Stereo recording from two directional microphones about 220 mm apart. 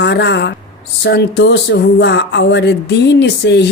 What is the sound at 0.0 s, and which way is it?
Speech, 50° left (ahead or behind).